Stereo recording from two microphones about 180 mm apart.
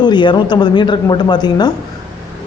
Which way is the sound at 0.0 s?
25° left (ahead or behind).